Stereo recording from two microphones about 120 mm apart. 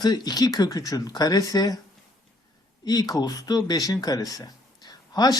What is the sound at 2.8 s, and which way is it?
Speech, 35° left (ahead or behind).